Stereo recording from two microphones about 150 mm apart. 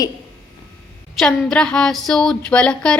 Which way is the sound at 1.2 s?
5° left (ahead or behind).